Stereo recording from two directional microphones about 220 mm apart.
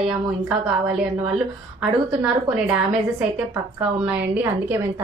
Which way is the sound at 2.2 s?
5° right (ahead or behind).